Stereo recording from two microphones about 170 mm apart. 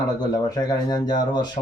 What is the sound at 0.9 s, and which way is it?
Speech, 25° left (ahead or behind).